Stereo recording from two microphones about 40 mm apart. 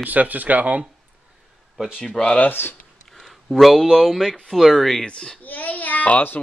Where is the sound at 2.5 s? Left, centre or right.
Left.